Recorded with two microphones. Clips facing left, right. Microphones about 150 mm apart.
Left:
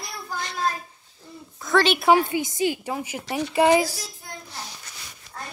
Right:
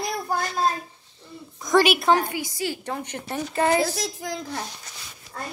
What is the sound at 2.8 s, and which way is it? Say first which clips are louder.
Speech: left 1 dB; 5° left (ahead or behind).